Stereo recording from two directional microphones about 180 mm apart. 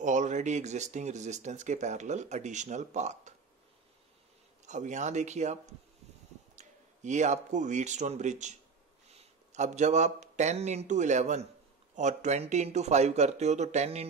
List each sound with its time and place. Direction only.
0.0 s speech: 40° right (ahead or behind)
4.6 s speech: 40° right (ahead or behind)